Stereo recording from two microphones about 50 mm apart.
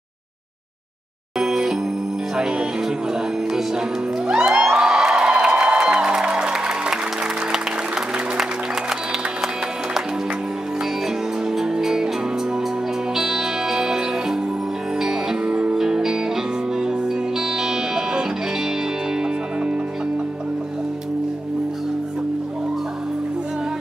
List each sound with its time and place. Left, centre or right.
1.4 s music: centre
2.3 s speech: centre
4.5 s music: centre
11.5 s music: centre
13.1 s music: centre
17.4 s music: centre